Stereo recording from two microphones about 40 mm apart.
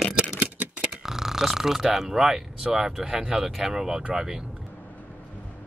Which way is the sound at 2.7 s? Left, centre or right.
Centre.